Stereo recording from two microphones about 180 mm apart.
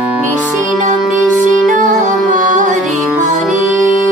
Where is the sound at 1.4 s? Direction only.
45° right (ahead or behind).